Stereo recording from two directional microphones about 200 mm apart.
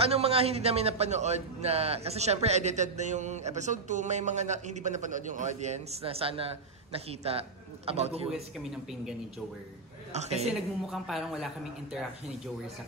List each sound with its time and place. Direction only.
0.0 s a man's voice: 30° right (ahead or behind)
8.3 s a man's voice: centre (ahead or behind)
10.1 s a man's voice: 35° right (ahead or behind)
10.9 s a man's voice: centre (ahead or behind)